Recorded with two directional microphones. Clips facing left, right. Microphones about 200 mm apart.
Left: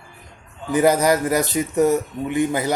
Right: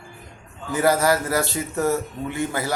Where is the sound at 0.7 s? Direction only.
20° left (ahead or behind).